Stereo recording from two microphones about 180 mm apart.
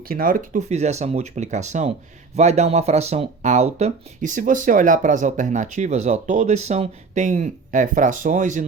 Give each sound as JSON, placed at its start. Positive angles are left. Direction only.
{"t": 0.1, "sound": "speech", "side_deg": -50}